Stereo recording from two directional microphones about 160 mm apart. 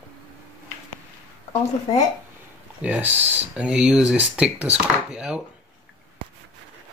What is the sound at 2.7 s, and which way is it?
Speech, 10° right (ahead or behind).